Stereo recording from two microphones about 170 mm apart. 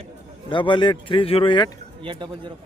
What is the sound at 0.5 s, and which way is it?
Speech, 30° left (ahead or behind).